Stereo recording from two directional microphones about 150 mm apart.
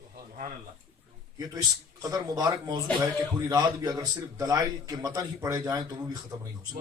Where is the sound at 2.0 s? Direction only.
25° right (ahead or behind).